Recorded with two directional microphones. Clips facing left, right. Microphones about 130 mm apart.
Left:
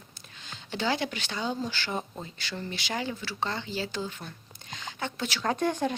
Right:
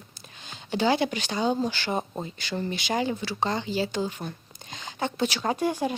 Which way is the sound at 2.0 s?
30° right (ahead or behind).